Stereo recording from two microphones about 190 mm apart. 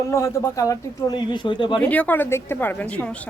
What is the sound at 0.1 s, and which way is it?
Speech, 15° left (ahead or behind).